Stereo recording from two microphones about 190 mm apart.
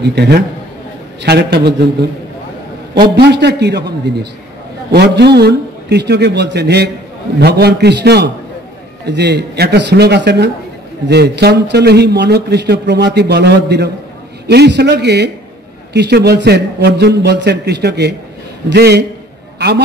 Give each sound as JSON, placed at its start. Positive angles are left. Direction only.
{"t": 0.0, "sound": "a man's voice", "side_deg": -60}
{"t": 2.9, "sound": "a man's voice", "side_deg": -60}